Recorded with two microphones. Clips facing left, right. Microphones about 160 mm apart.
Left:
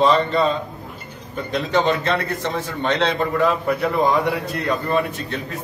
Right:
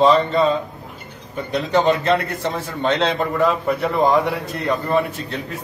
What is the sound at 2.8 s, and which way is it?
A man's voice, centre (ahead or behind).